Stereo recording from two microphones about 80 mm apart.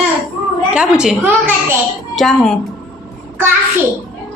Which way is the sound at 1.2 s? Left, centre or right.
Right.